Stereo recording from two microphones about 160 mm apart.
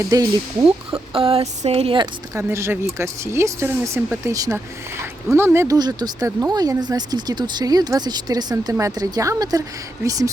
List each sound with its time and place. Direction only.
0.0 s speech: 20° right (ahead or behind)
1.1 s a sound: 35° right (ahead or behind)
2.3 s speech: 15° right (ahead or behind)